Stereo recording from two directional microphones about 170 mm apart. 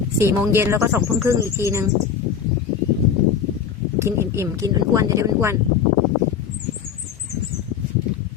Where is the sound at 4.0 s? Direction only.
15° right (ahead or behind).